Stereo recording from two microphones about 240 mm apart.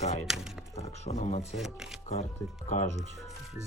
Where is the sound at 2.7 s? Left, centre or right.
Left.